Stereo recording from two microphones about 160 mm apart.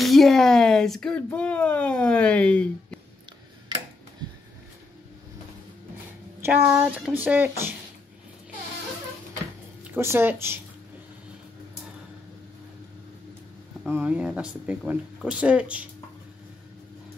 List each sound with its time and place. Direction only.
0.0 s speech: centre (ahead or behind)
6.4 s speech: 10° right (ahead or behind)
9.9 s speech: 15° right (ahead or behind)
13.8 s speech: 10° right (ahead or behind)